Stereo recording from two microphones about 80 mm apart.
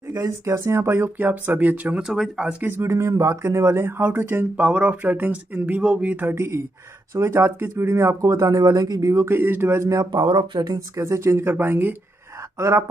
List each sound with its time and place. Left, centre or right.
0.2 s speech: right; by 2.0 s centre
2.0 s speech: centre
2.6 s speech: right
6.3 s speech: right
8.4 s speech: right
9.1 s speech: right
10.1 s speech: right
10.6 s speech: right
12.5 s speech: right